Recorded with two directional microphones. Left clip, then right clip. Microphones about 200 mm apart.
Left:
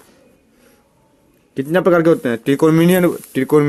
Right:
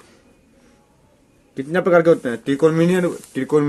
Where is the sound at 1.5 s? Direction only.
40° left (ahead or behind).